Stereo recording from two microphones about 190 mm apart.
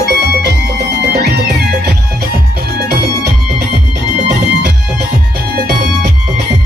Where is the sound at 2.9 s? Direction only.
55° right (ahead or behind).